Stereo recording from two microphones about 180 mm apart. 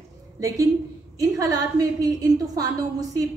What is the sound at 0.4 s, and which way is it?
A woman's voice, 20° right (ahead or behind).